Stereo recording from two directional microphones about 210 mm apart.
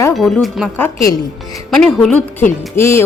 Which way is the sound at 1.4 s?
Centre (ahead or behind).